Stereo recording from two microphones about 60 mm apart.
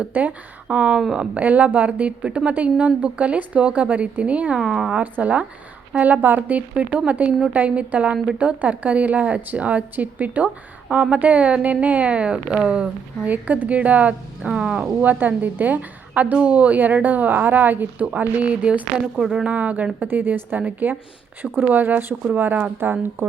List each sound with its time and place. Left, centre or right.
0.1 s speech: right
0.8 s a woman's voice: centre
1.4 s a woman's voice: right
4.6 s a woman's voice: centre
5.1 s a woman's voice: right
15.0 s a woman's voice: right; by 19.5 s centre
19.5 s a woman's voice: right